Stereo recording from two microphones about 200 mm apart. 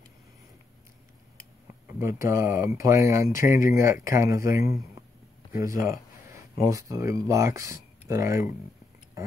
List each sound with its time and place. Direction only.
2.0 s speech: 15° right (ahead or behind)